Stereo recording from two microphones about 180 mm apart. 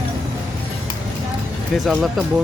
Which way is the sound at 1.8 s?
Centre (ahead or behind).